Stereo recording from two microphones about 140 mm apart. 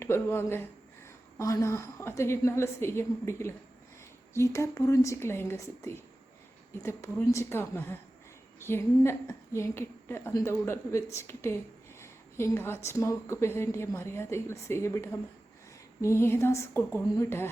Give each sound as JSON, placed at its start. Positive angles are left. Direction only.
{"t": 0.0, "sound": "a woman's voice", "side_deg": 15}